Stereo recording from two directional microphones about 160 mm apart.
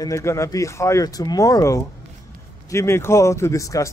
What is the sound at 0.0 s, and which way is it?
Speech, 20° left (ahead or behind).